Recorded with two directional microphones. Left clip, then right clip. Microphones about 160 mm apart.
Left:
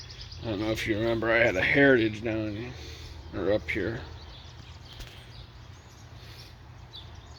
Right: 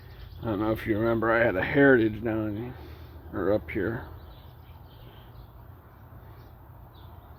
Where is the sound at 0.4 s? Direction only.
20° right (ahead or behind).